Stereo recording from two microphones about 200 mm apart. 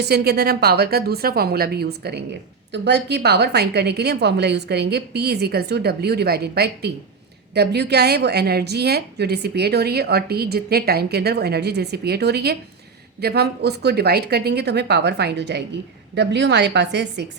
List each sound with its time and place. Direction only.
0.0 s a woman's voice: 55° right (ahead or behind)